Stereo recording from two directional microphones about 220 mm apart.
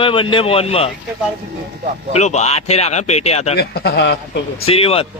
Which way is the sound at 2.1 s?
30° left (ahead or behind).